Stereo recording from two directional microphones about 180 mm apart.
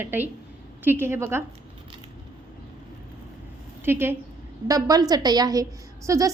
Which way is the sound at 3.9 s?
15° right (ahead or behind).